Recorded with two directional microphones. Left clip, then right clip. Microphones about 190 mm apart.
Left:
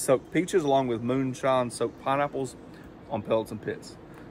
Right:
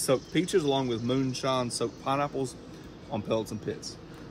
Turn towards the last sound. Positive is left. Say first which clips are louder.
# left 3 dB
turn(degrees=0)  # may be behind; listen again after turning